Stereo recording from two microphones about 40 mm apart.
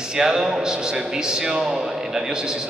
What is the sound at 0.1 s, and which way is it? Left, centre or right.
A man's voice, centre.